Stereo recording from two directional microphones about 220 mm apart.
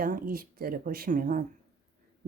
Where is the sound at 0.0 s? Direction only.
40° right (ahead or behind).